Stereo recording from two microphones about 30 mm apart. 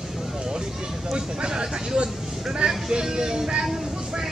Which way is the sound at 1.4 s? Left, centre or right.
Right.